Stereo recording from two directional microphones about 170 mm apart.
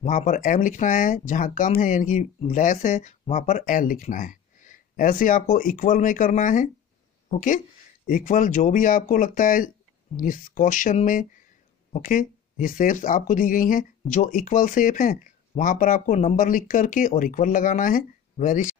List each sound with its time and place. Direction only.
0.0 s speech: 50° left (ahead or behind)